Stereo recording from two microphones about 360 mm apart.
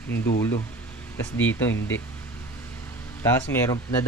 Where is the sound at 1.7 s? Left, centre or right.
Left.